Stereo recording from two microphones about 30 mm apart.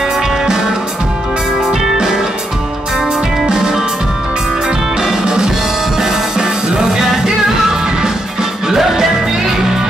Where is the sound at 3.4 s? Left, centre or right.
Right.